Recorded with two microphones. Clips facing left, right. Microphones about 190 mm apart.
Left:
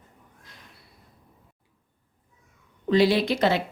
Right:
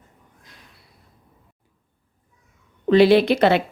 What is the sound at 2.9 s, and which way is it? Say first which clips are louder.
Speech: right 7 dB; 65° right (ahead or behind).